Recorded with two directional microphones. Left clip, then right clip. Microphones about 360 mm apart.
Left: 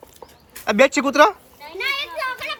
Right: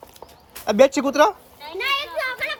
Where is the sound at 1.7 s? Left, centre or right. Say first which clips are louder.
Right 1 dB; right.